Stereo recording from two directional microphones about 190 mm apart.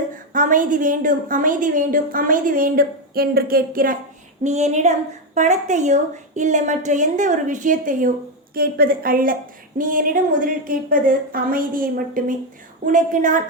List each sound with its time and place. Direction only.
0.1 s a woman's voice: 45° right (ahead or behind)
4.4 s a woman's voice: 35° right (ahead or behind)